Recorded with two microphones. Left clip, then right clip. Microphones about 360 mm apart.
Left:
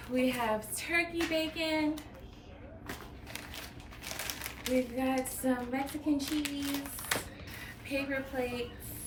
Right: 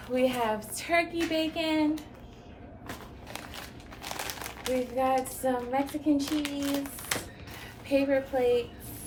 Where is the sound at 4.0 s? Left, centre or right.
Centre.